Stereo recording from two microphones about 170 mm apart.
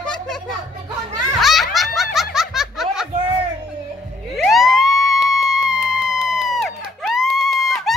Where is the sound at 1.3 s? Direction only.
Centre (ahead or behind).